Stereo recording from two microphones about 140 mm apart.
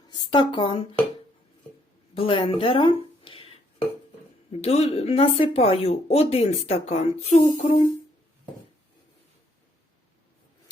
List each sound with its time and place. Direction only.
0.1 s speech: 35° left (ahead or behind)
2.1 s speech: 40° left (ahead or behind)
4.6 s speech: 50° left (ahead or behind)